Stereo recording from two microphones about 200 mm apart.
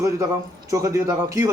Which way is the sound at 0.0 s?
15° right (ahead or behind).